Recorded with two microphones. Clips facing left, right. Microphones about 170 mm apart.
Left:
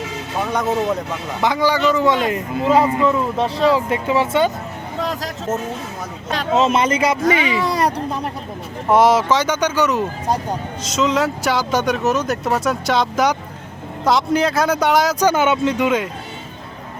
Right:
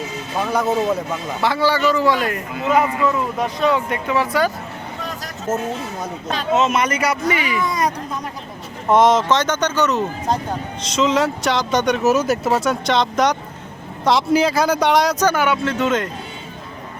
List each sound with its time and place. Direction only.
1.4 s a man's voice: 15° left (ahead or behind)
4.9 s vehicle: 90° left
6.6 s a man's voice: 30° left (ahead or behind)
8.9 s speech: 10° left (ahead or behind)
10.9 s speech: centre (ahead or behind)
15.3 s speech: 20° left (ahead or behind)